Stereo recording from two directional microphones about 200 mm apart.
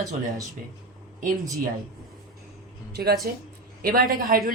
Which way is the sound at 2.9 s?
50° right (ahead or behind).